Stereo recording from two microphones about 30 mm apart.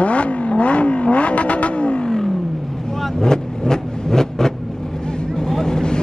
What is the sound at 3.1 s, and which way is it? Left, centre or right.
Vehicle, left.